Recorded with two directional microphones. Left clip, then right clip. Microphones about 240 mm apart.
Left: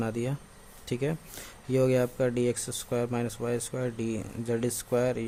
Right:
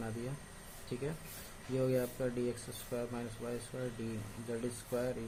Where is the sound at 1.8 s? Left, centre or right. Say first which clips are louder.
Left 9 dB; left.